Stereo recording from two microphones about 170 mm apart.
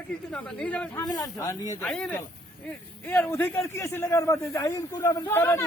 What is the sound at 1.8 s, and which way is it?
A man's voice, 5° left (ahead or behind).